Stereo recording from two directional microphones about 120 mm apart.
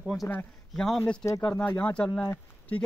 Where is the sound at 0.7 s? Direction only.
5° left (ahead or behind).